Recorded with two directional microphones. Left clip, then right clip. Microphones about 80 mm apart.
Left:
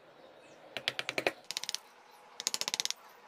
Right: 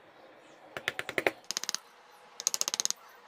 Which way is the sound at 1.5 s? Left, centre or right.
Right.